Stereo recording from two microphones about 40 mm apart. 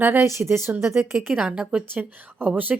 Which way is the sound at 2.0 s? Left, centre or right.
Right.